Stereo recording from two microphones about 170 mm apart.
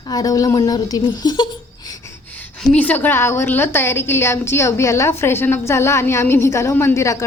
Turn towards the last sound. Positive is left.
turn(degrees=15)  # may be behind; listen again after turning